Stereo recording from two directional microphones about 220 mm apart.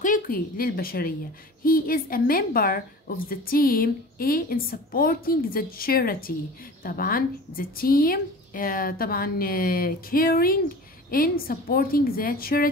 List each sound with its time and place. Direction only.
0.0 s a woman's voice: 40° left (ahead or behind)